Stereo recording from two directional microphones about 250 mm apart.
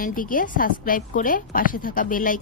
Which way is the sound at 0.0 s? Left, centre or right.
Left.